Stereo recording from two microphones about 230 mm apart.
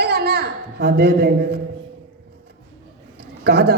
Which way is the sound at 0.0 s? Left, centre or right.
Right.